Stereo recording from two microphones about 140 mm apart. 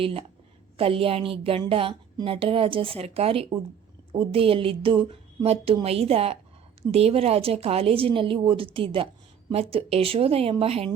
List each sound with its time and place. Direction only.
0.0 s a woman's voice: 45° right (ahead or behind)